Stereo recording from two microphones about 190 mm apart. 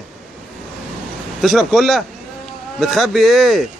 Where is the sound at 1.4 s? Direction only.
Centre (ahead or behind).